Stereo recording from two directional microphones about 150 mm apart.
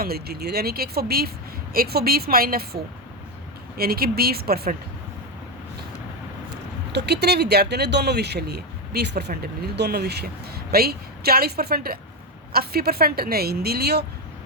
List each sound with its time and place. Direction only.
0.0 s speech: 90° right
3.8 s speech: 85° right
7.0 s speech: 90° right